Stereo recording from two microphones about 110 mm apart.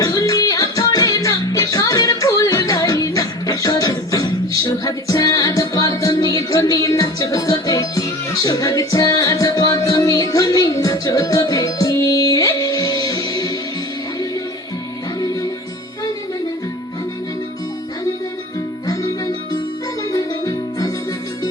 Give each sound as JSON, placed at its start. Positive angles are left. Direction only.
{"t": 0.0, "sound": "music", "side_deg": 35}
{"t": 15.2, "sound": "music", "side_deg": 35}
{"t": 20.1, "sound": "music", "side_deg": 35}